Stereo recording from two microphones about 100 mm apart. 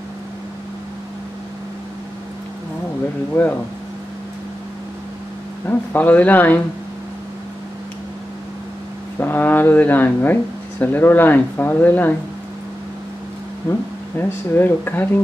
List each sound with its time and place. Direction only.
5.7 s speech: 15° left (ahead or behind)
9.2 s speech: 20° left (ahead or behind)
13.7 s speech: 20° left (ahead or behind)